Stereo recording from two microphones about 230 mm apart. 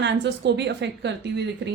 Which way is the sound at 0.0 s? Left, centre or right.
Right.